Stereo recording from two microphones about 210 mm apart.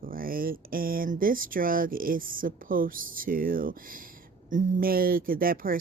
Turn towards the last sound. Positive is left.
turn(degrees=-40)  # may be behind; listen again after turning